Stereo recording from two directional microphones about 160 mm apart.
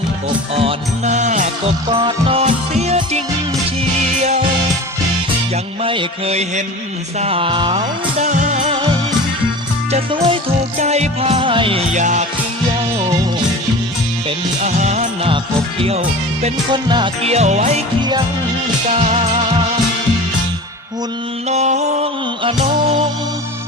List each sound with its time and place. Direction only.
0.5 s music: 40° right (ahead or behind)
1.9 s music: 35° right (ahead or behind)
5.8 s music: 35° right (ahead or behind)
8.2 s music: 50° right (ahead or behind)
9.9 s music: 35° right (ahead or behind)
10.8 s music: 45° right (ahead or behind)
11.9 s music: 50° right (ahead or behind)
14.6 s music: 45° right (ahead or behind)
16.7 s music: 30° right (ahead or behind)
17.2 s music: 45° right (ahead or behind)
18.9 s music: 40° right (ahead or behind)
21.5 s music: 45° right (ahead or behind)